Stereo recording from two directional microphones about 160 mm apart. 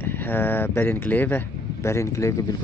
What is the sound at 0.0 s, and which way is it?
Speech, 10° left (ahead or behind).